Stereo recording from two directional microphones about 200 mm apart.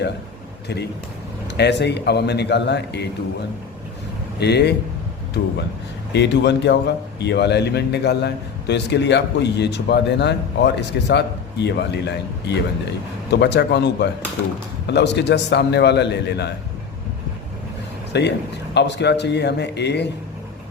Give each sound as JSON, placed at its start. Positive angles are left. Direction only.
{"t": 1.5, "sound": "a man's voice", "side_deg": 60}
{"t": 4.4, "sound": "a man's voice", "side_deg": 55}
{"t": 6.1, "sound": "a man's voice", "side_deg": 60}
{"t": 18.1, "sound": "a man's voice", "side_deg": 60}